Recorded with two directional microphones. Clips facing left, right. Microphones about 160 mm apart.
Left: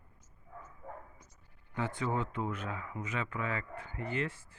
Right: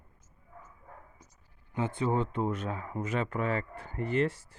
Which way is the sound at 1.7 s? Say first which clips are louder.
Right 5 dB; 25° right (ahead or behind).